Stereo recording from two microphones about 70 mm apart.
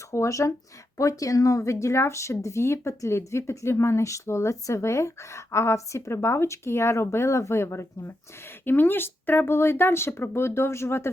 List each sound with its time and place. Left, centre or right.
0.1 s speech: left